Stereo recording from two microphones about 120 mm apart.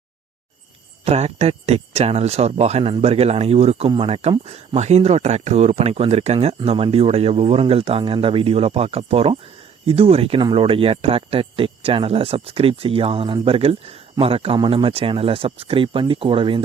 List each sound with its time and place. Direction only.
1.0 s speech: 60° right (ahead or behind)